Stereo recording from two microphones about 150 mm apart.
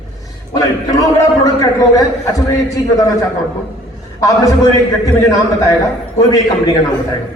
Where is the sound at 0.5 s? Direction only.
25° left (ahead or behind).